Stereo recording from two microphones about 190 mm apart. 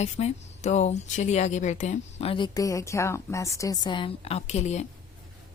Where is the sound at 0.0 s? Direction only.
35° left (ahead or behind).